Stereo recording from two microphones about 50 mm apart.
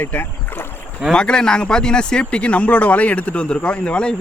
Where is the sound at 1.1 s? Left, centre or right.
Centre.